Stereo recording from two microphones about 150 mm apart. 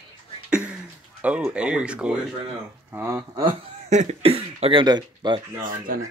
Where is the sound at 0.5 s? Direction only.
5° right (ahead or behind).